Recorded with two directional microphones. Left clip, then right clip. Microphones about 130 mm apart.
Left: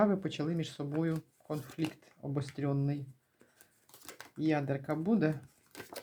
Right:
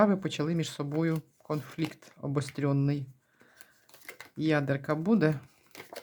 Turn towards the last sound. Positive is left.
turn(degrees=-35)  # may be behind; listen again after turning